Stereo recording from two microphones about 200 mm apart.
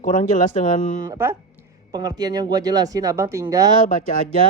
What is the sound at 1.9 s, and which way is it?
Speech, 20° right (ahead or behind).